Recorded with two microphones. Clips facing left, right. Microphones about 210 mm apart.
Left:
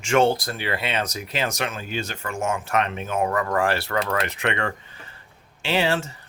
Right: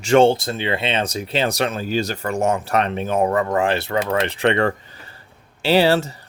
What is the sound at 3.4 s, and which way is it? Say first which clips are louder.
Speech: right 3 dB; 20° right (ahead or behind).